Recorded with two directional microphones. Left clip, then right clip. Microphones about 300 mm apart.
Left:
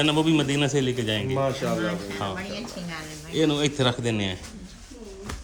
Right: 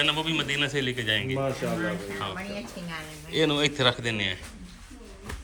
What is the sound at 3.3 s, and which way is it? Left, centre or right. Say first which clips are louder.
A man's voice: left 1 dB; centre.